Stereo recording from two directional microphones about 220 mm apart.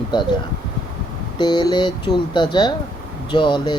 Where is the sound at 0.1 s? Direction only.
20° left (ahead or behind).